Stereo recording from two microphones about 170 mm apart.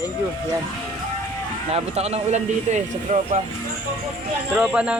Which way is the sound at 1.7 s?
40° right (ahead or behind).